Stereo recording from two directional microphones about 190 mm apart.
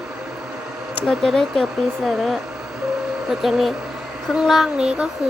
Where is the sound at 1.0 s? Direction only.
Centre (ahead or behind).